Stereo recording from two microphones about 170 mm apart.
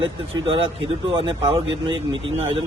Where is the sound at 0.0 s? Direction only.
30° right (ahead or behind).